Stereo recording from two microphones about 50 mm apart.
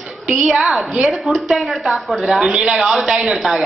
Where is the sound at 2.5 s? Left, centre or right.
Centre.